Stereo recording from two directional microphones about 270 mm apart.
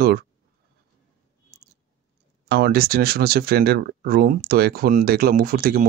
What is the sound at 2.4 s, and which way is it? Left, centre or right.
Speech, right.